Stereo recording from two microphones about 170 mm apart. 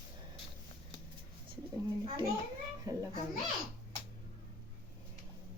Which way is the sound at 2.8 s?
20° right (ahead or behind).